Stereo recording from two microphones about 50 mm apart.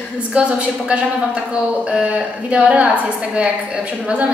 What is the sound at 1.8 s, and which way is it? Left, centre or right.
A woman's voice, right.